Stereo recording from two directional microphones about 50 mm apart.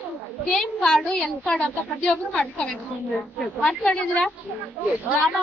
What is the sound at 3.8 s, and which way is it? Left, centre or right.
Speech, left.